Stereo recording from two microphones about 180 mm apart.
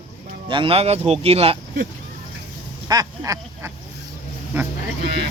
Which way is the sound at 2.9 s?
20° right (ahead or behind).